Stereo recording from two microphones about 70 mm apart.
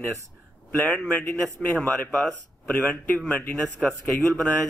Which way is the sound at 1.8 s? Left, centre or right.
Centre.